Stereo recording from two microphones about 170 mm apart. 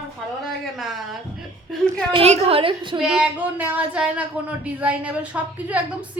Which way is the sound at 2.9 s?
5° right (ahead or behind).